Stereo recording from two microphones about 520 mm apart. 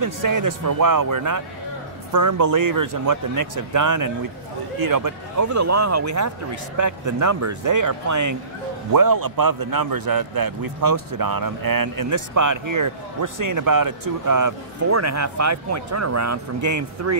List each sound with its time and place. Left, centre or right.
0.0 s a man's voice: right